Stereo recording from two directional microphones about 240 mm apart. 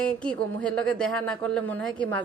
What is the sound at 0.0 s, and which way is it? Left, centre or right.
A woman's voice, centre.